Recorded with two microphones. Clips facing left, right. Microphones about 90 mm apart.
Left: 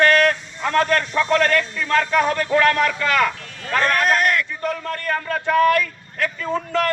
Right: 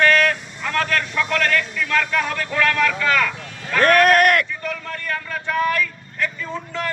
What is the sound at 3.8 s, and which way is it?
Speech, 60° right (ahead or behind).